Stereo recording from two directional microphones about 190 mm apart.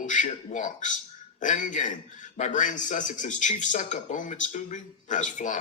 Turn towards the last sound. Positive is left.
turn(degrees=40)  # may be behind; listen again after turning